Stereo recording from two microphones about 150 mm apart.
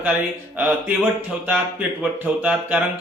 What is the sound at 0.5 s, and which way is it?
Speech, 10° right (ahead or behind).